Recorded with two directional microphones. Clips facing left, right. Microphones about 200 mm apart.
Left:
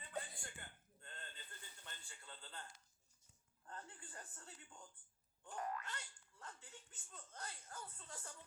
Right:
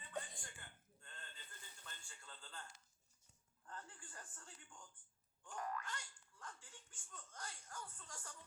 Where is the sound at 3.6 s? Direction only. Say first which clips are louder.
Left 1 dB; 25° left (ahead or behind).